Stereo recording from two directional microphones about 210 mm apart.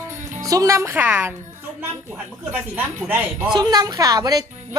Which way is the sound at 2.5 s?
10° right (ahead or behind).